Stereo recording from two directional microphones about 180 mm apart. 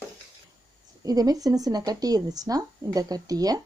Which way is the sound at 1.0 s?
20° right (ahead or behind).